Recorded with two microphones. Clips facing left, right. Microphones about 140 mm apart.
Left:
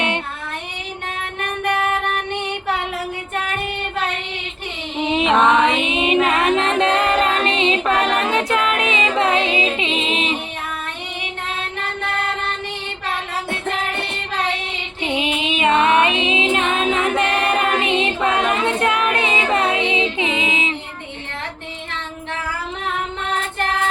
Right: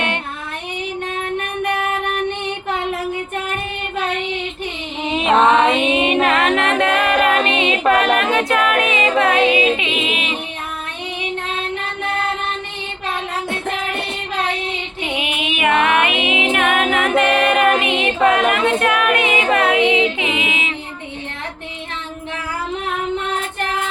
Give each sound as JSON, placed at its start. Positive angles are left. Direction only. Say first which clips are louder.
{"t": 5.0, "sound": "mantra", "louder": "left 2 dB", "side_deg": 20}
{"t": 5.3, "sound": "mantra", "louder": "right 3 dB", "side_deg": -25}
{"t": 5.8, "sound": "music", "louder": "right 2 dB", "side_deg": 20}
{"t": 15.0, "sound": "music", "louder": "left 3 dB", "side_deg": 25}
{"t": 19.8, "sound": "female singing", "louder": "right 4 dB", "side_deg": 25}